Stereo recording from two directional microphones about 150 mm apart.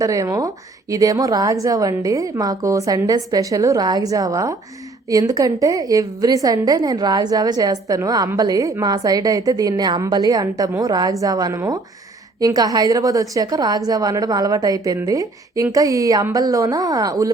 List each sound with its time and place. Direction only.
0.0 s a woman's voice: 20° right (ahead or behind)